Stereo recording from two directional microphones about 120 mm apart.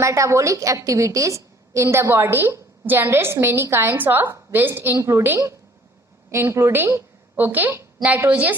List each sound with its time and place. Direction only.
0.0 s a woman's voice: 25° right (ahead or behind)